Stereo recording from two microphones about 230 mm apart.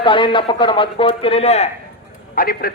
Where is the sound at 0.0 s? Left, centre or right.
Left.